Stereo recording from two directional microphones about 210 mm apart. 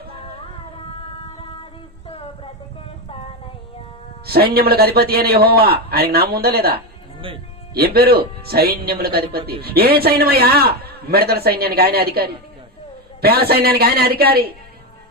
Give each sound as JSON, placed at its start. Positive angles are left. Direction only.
{"t": 0.9, "sound": "a sound", "side_deg": 25}
{"t": 4.3, "sound": "a man's voice", "side_deg": -50}
{"t": 7.2, "sound": "speech", "side_deg": -25}
{"t": 7.7, "sound": "a man's voice", "side_deg": -45}